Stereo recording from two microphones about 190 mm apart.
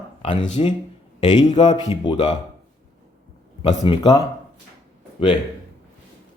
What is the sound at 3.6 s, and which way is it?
Speech, 25° left (ahead or behind).